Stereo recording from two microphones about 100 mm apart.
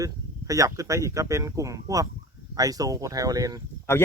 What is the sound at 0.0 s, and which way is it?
Speech, 35° right (ahead or behind).